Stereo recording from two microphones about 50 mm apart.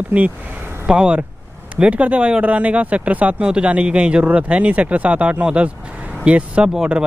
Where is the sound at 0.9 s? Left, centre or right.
Centre.